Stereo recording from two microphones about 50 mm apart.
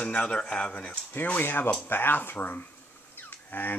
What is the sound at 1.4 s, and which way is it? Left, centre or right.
Speech, left.